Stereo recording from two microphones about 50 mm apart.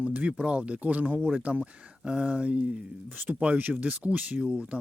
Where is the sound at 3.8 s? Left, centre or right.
Right.